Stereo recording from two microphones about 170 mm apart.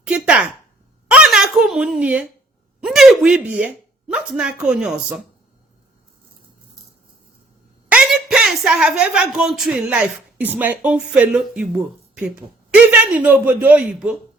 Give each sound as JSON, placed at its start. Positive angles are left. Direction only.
{"t": 0.0, "sound": "a sound", "side_deg": -5}
{"t": 2.8, "sound": "speech", "side_deg": 0}
{"t": 7.9, "sound": "a man's voice", "side_deg": -5}